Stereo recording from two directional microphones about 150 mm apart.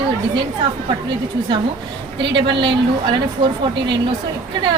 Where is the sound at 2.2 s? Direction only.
35° right (ahead or behind).